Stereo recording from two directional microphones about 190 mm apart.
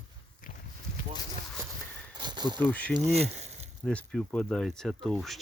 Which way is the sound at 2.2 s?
25° right (ahead or behind).